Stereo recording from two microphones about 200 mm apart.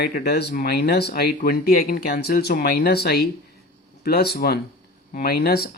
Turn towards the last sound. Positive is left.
turn(degrees=50)  # may be behind; listen again after turning